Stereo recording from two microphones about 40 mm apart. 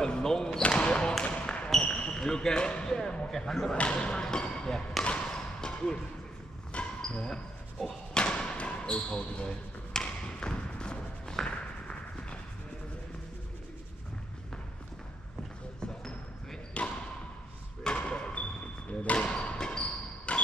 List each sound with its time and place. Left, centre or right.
0.0 s basketball bounce: centre
0.6 s basketball bounce: left
2.1 s speech: centre
3.7 s speech: left
4.2 s speech: centre
5.0 s basketball bounce: left
6.7 s a sound: left
7.8 s speech: centre
8.2 s basketball bounce: left
11.9 s a sound: left
16.8 s basketball bounce: left
17.8 s thump: left
19.1 s music: left
19.8 s basketball bounce: left